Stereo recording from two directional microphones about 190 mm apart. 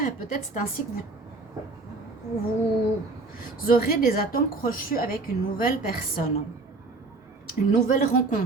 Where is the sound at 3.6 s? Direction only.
50° left (ahead or behind).